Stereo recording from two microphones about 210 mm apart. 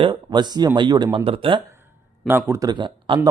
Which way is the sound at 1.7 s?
10° right (ahead or behind).